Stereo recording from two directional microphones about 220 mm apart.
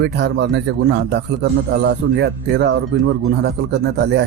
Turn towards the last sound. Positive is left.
turn(degrees=-50)  # may be behind; listen again after turning